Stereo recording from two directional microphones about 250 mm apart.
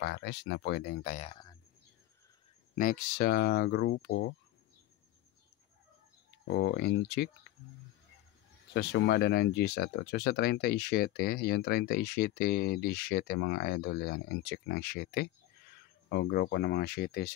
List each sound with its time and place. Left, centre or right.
0.0 s speech: left; by 1.6 s centre
2.7 s speech: left
6.4 s speech: left
8.7 s speech: left